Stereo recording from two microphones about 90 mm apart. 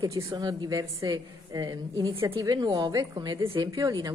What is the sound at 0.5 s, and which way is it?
A woman's voice, 45° right (ahead or behind).